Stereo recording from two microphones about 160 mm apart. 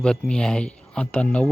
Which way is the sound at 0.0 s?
5° left (ahead or behind).